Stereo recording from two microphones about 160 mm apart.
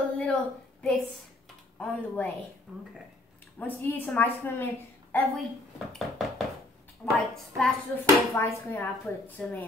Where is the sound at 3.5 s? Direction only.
10° left (ahead or behind).